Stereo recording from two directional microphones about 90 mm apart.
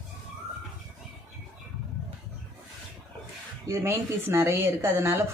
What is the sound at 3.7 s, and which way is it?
Speech, 30° right (ahead or behind).